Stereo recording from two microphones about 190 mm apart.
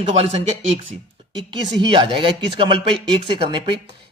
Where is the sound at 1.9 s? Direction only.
25° right (ahead or behind).